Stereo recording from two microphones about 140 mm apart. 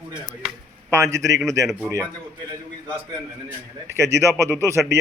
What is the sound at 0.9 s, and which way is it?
Speech, 20° right (ahead or behind).